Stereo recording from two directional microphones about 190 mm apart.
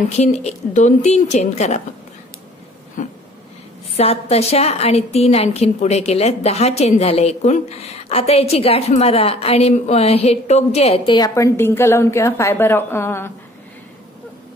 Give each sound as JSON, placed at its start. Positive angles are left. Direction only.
{"t": 0.2, "sound": "a woman's voice", "side_deg": 35}
{"t": 3.0, "sound": "a sound", "side_deg": 45}
{"t": 3.9, "sound": "a woman's voice", "side_deg": 35}
{"t": 11.1, "sound": "a woman's voice", "side_deg": 20}